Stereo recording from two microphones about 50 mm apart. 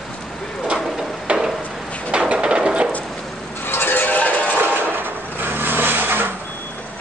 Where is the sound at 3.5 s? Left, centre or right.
Left.